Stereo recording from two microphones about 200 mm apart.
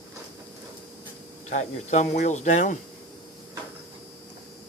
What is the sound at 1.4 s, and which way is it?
Speech, 35° left (ahead or behind).